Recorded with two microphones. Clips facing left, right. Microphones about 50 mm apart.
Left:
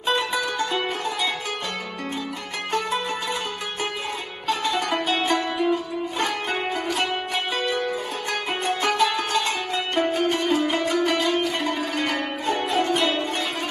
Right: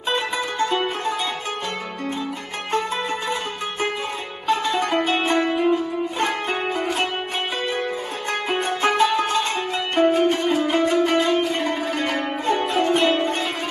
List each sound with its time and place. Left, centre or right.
0.1 s music: right
2.7 s music: right
4.4 s music: right